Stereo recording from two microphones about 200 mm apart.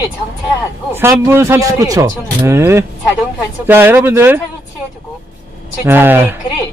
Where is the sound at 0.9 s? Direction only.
10° right (ahead or behind).